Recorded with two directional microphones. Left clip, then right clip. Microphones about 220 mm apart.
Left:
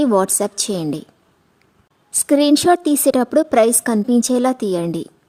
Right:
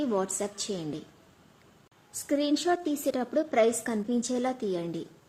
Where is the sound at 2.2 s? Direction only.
50° left (ahead or behind).